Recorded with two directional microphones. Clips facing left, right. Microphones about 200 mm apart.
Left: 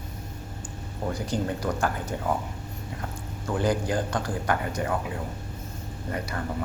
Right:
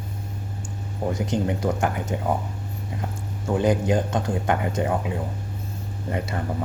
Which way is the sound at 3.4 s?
20° right (ahead or behind).